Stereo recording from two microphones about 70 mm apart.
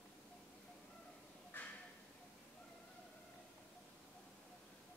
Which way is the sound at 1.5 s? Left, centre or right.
Left.